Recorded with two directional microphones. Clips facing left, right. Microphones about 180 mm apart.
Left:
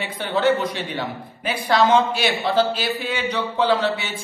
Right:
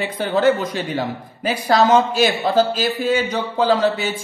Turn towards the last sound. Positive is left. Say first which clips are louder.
# right 3 dB
turn(degrees=-40)  # may be behind; listen again after turning